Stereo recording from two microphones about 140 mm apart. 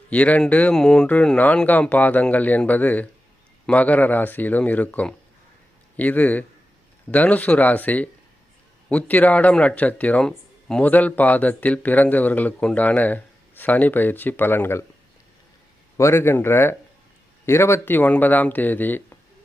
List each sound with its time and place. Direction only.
0.1 s speech: 10° left (ahead or behind)
16.0 s speech: 20° left (ahead or behind)